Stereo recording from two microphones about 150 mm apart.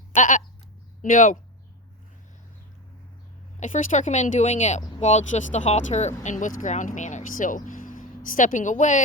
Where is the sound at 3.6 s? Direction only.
60° left (ahead or behind).